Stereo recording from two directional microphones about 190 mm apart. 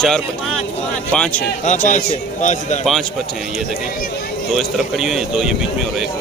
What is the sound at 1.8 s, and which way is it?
Speech, 40° left (ahead or behind).